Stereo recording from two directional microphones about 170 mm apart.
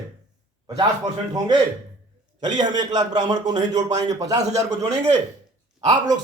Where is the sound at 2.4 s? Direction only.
25° right (ahead or behind).